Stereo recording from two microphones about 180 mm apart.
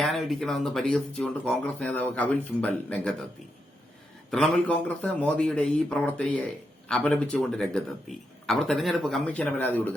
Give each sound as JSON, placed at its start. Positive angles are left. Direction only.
{"t": 0.0, "sound": "a man's voice", "side_deg": 0}
{"t": 4.3, "sound": "a man's voice", "side_deg": 5}